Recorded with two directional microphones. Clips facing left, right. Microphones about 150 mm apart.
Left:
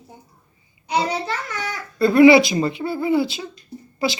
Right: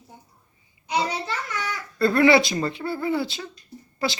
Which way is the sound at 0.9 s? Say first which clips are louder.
Left 4 dB; 30° left (ahead or behind).